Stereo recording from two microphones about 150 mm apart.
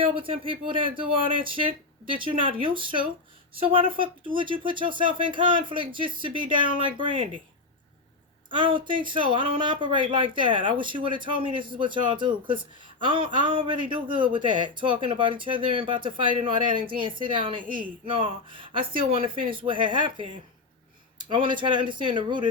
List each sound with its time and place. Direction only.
0.0 s speech: 35° right (ahead or behind)
8.4 s speech: 35° right (ahead or behind)